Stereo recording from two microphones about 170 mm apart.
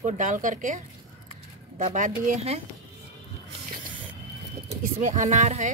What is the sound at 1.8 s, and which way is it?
Speech, 50° right (ahead or behind).